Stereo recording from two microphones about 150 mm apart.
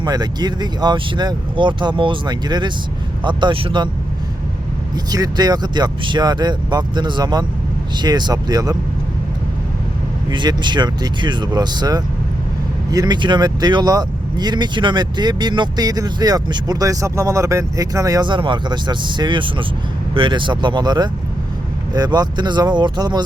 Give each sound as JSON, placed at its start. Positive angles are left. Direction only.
{"t": 0.0, "sound": "speech", "side_deg": -30}
{"t": 5.1, "sound": "speech", "side_deg": -25}
{"t": 10.2, "sound": "speech", "side_deg": -30}